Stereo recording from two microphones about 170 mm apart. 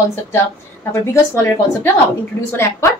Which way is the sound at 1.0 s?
15° left (ahead or behind).